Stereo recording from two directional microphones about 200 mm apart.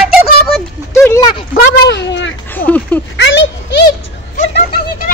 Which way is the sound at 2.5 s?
10° left (ahead or behind).